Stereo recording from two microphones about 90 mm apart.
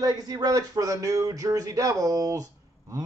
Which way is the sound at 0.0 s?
45° right (ahead or behind).